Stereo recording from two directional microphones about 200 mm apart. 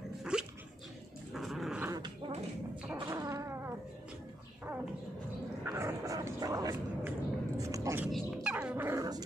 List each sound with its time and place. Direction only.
0.2 s dog: 5° right (ahead or behind)
1.9 s dog: 20° right (ahead or behind)
2.9 s a sound: 15° right (ahead or behind)
5.7 s dog: 15° right (ahead or behind)
7.1 s a sound: 15° right (ahead or behind)
8.1 s dog: 5° right (ahead or behind)